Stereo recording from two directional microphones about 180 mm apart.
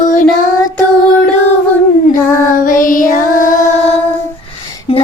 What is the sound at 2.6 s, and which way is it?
Music, 50° left (ahead or behind).